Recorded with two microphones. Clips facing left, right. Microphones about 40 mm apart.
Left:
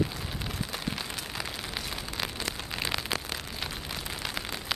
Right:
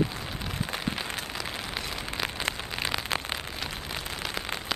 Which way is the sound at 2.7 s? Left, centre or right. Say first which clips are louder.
Right 1 dB; centre.